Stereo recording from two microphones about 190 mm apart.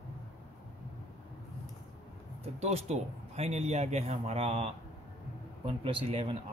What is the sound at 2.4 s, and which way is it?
Speech, 35° right (ahead or behind).